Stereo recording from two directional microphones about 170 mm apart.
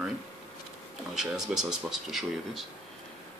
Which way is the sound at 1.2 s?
5° right (ahead or behind).